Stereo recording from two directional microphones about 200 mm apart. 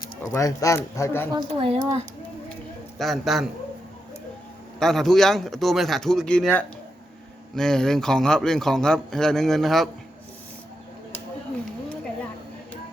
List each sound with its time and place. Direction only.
0.0 s speech: 15° left (ahead or behind)
1.3 s speech: 25° right (ahead or behind)
3.0 s a man's voice: centre (ahead or behind)
4.8 s a man's voice: centre (ahead or behind)